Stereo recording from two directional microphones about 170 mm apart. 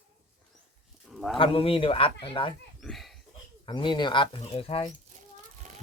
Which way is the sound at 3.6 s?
25° left (ahead or behind).